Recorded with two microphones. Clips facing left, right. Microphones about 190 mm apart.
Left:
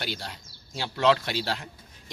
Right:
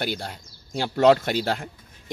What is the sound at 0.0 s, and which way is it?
A man's voice, 50° right (ahead or behind).